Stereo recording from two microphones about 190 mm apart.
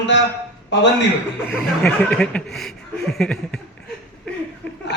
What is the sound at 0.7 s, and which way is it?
Speech, 65° left (ahead or behind).